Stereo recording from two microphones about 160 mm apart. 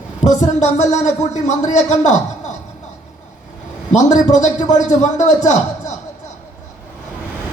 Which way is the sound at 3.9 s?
50° left (ahead or behind).